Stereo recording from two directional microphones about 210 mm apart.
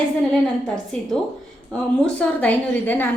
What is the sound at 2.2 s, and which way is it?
Speech, 5° left (ahead or behind).